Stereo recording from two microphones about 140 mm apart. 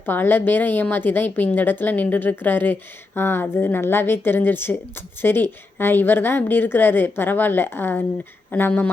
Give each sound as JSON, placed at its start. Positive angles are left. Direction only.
{"t": 0.0, "sound": "a woman's voice", "side_deg": 15}